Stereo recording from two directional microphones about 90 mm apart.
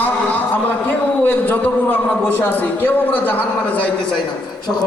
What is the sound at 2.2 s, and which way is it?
A man's voice, 20° left (ahead or behind).